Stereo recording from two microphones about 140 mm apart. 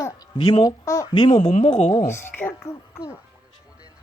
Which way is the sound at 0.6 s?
25° left (ahead or behind).